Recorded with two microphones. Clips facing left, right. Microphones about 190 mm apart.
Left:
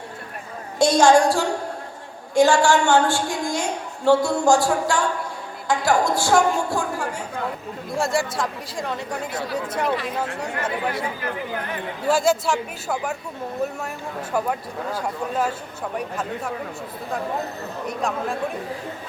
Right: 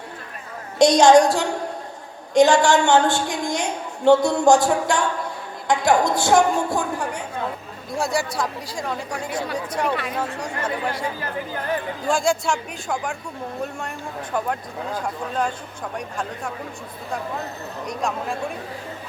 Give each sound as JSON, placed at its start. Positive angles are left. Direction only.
{"t": 0.8, "sound": "a woman's voice", "side_deg": -20}
{"t": 7.9, "sound": "a woman's voice", "side_deg": 0}
{"t": 12.0, "sound": "a woman's voice", "side_deg": 5}
{"t": 14.3, "sound": "a woman's voice", "side_deg": 5}
{"t": 17.8, "sound": "a woman's voice", "side_deg": 0}